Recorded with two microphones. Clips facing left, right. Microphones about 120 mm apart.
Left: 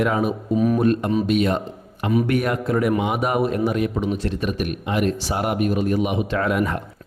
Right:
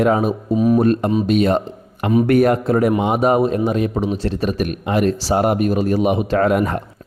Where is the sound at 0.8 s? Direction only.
40° right (ahead or behind).